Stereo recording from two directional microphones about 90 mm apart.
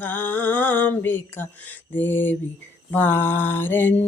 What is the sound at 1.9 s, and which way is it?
Mantra, 20° left (ahead or behind).